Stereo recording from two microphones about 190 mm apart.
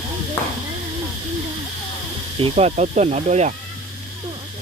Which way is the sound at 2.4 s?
35° right (ahead or behind).